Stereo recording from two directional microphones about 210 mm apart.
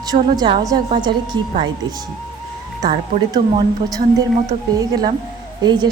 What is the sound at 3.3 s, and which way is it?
A woman's voice, 20° right (ahead or behind).